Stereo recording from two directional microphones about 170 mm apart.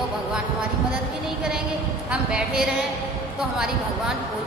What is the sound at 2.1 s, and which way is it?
Speech, 5° right (ahead or behind).